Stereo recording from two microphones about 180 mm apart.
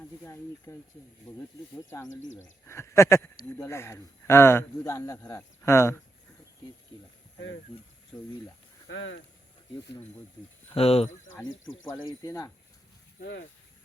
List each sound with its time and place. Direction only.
0.3 s speech: 15° left (ahead or behind)
2.0 s speech: 90° left
2.4 s speech: 15° left (ahead or behind)
8.1 s speech: 5° left (ahead or behind)
8.9 s speech: 90° left
10.8 s speech: 35° left (ahead or behind)
11.4 s speech: 90° left
12.0 s speech: 20° left (ahead or behind)